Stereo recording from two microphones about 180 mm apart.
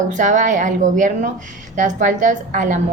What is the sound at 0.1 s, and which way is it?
A woman's voice, 45° right (ahead or behind).